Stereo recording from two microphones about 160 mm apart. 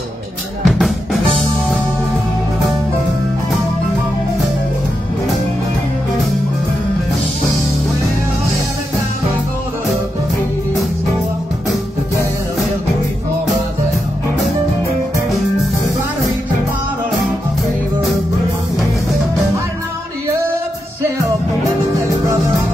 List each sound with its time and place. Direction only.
0.7 s drum: centre (ahead or behind)
21.0 s music: 20° right (ahead or behind)